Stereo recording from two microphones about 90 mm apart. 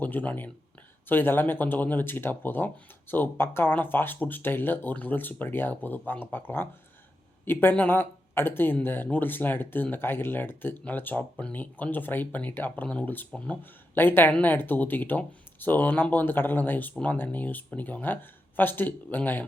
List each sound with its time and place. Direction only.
0.0 s speech: 20° left (ahead or behind)